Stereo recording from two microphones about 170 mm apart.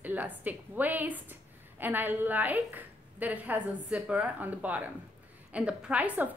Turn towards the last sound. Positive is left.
turn(degrees=-10)  # may be behind; listen again after turning